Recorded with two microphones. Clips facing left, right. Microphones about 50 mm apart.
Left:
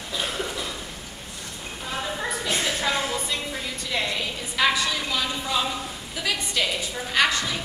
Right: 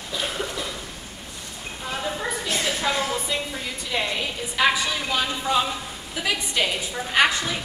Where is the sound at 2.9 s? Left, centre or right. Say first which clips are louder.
Right 1 dB; centre.